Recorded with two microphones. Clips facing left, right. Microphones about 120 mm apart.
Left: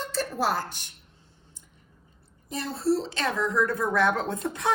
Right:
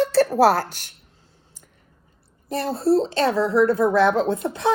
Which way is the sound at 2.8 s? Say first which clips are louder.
Right 7 dB; 30° right (ahead or behind).